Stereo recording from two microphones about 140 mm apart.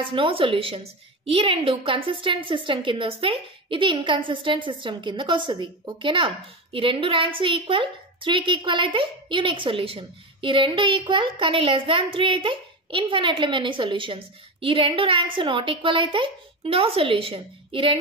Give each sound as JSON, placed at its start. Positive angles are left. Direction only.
{"t": 0.0, "sound": "a woman's voice", "side_deg": -35}